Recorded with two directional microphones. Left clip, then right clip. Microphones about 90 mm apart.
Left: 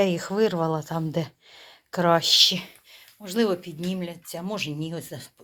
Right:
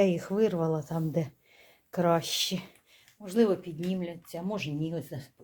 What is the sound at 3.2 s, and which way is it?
Speech, 10° left (ahead or behind).